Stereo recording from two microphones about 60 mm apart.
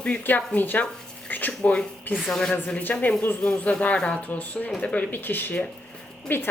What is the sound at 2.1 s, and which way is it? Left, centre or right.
Speech, left.